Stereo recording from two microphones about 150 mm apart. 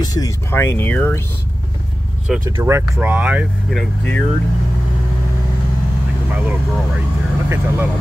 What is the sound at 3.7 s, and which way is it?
Speech, 5° left (ahead or behind).